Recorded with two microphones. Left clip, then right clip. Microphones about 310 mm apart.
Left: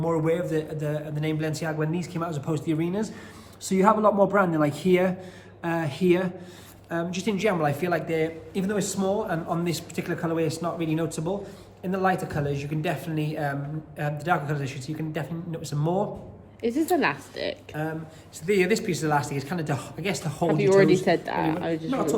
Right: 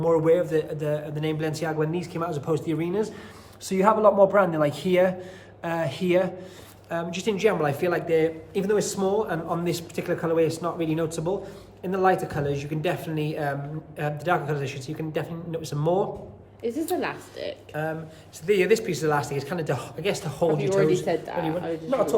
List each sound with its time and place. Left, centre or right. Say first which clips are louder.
0.0 s speech: right 5 dB; centre
16.6 s a woman's voice: left 3 dB; left
18.4 s speech: right 2 dB; centre
21.0 s a woman's voice: left 3 dB; left
21.8 s a man's voice: right 6 dB; centre